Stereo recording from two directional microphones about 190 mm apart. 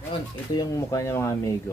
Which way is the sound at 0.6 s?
15° left (ahead or behind).